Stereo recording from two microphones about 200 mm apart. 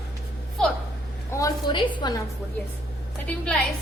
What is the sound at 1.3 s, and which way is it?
Speech, 15° left (ahead or behind).